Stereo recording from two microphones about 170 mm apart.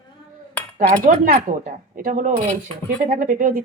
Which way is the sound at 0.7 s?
50° right (ahead or behind).